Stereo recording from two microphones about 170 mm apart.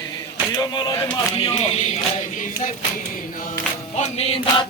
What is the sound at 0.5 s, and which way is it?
Speech, 25° left (ahead or behind).